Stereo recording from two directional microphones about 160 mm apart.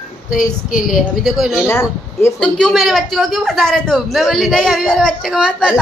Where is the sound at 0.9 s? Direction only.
Centre (ahead or behind).